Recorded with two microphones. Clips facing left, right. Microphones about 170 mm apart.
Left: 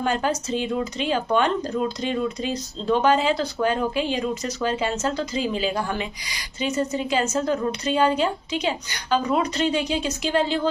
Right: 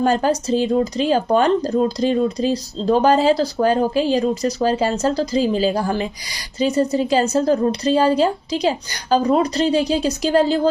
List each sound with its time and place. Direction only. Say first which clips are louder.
0.0 s speech: right 6 dB; 35° right (ahead or behind)